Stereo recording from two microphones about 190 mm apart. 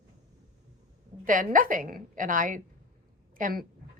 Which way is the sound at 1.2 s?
45° right (ahead or behind).